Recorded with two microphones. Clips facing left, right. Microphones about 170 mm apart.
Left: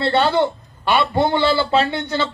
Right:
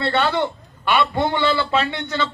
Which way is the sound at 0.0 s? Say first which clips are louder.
Left 3 dB; 30° left (ahead or behind).